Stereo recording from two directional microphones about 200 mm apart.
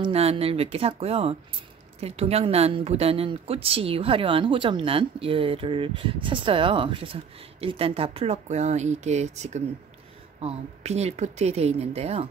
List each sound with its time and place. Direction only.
0.0 s speech: 30° right (ahead or behind)